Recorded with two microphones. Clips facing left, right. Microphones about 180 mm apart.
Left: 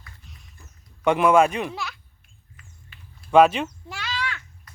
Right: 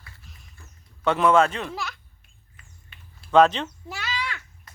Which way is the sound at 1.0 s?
15° left (ahead or behind).